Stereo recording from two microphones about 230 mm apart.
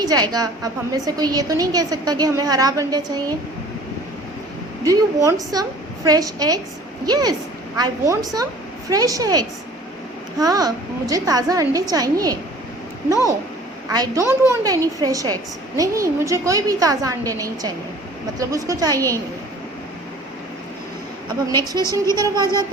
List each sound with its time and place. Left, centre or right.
0.0 s a woman's voice: centre
4.8 s a woman's voice: centre
13.9 s a woman's voice: centre
21.4 s a woman's voice: centre